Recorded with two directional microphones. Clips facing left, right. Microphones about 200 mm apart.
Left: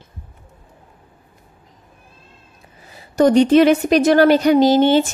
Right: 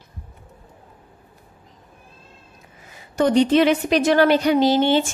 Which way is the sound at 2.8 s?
35° left (ahead or behind).